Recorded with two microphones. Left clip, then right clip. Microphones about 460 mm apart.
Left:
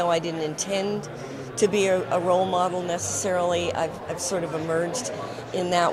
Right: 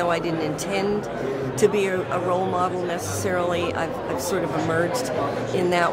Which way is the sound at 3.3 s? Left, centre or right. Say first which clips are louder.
Even; left.